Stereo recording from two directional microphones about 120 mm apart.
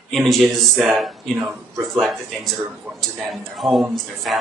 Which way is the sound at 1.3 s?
20° right (ahead or behind).